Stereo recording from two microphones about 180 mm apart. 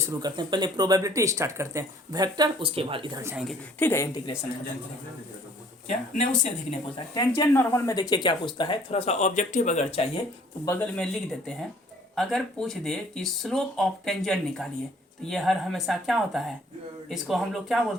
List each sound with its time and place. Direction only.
0.1 s speech: 20° right (ahead or behind)
3.8 s speech: 10° left (ahead or behind)
5.9 s speech: 40° left (ahead or behind)
7.1 s speech: 20° left (ahead or behind); by 10.1 s 35° left (ahead or behind)
10.7 s speech: 15° left (ahead or behind)
11.0 s speech: 5° left (ahead or behind)